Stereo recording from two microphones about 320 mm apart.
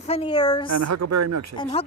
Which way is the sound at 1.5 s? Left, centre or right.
Centre.